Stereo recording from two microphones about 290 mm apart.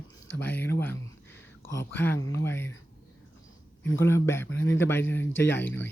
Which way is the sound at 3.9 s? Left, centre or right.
Centre.